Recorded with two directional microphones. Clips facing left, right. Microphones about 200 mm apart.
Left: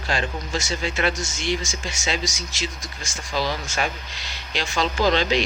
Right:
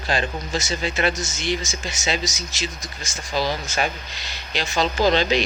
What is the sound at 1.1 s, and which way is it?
Speech, 5° right (ahead or behind).